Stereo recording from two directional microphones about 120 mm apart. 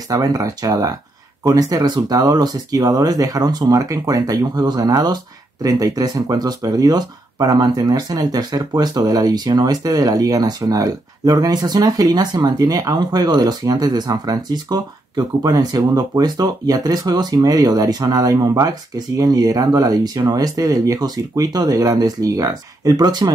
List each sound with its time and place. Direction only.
0.1 s speech: 30° right (ahead or behind)